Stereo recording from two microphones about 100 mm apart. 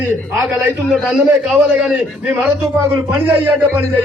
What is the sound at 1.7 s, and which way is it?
Speech, 10° right (ahead or behind).